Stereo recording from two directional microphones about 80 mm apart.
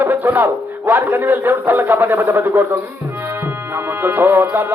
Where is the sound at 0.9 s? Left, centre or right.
Right.